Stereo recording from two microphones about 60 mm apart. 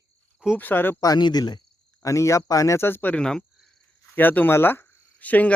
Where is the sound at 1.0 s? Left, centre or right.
Left.